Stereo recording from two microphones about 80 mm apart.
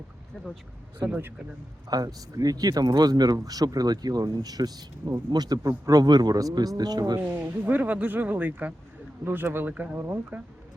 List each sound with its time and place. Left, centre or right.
1.9 s speech: right
7.2 s speech: right